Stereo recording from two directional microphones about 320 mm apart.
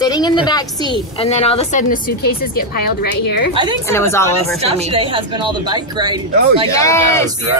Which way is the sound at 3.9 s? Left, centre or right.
Centre.